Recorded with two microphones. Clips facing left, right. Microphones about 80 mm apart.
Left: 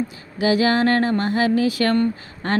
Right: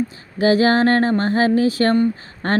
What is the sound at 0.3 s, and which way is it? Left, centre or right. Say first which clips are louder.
Speech: right 3 dB; right.